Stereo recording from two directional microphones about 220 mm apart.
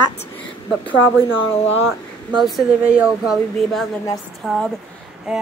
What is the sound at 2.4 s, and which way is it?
Speech, centre (ahead or behind).